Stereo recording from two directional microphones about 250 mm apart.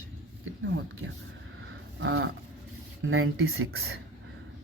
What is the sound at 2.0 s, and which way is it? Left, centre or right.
Speech, right.